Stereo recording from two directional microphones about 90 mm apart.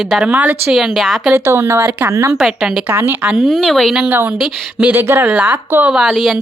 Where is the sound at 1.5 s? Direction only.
30° right (ahead or behind).